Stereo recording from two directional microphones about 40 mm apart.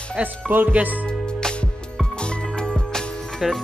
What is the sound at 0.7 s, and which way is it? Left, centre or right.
Speech, right.